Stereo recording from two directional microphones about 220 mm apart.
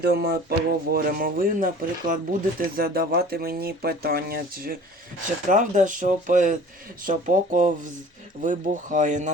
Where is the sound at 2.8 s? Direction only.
45° right (ahead or behind).